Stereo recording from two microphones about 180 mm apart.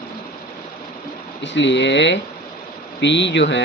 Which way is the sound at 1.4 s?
80° left.